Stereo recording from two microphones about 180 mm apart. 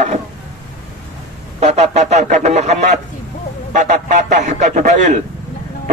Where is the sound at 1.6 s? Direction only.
40° right (ahead or behind).